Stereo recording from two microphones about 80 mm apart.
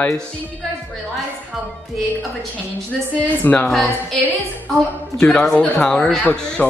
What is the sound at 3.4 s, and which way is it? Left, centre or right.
Speech, left.